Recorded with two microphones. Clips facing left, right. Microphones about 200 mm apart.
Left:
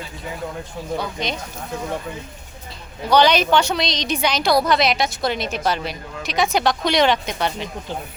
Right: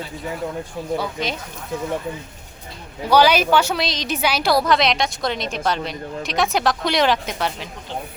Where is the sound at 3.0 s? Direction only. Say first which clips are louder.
Even; 5° right (ahead or behind).